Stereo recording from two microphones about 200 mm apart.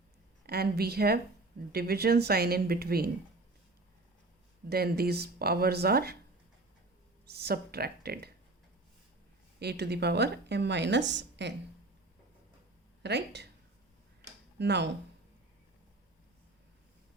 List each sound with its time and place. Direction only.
0.4 s speech: 50° right (ahead or behind)
4.7 s speech: 50° right (ahead or behind)
7.3 s speech: 50° right (ahead or behind)
9.6 s a woman's voice: 55° right (ahead or behind)
13.0 s speech: 60° right (ahead or behind)
14.6 s a woman's voice: 60° right (ahead or behind)